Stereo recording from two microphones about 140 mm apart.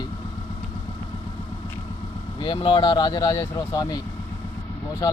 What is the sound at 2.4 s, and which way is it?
Speech, 35° left (ahead or behind).